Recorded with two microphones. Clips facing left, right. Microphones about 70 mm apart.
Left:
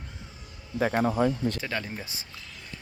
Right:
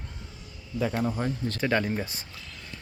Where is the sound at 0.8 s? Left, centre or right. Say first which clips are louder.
Left 4 dB; left.